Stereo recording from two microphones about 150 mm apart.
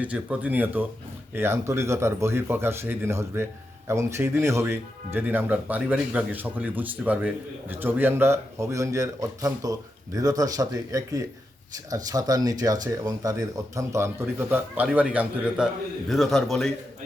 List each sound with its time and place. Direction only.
0.0 s speech: 10° right (ahead or behind)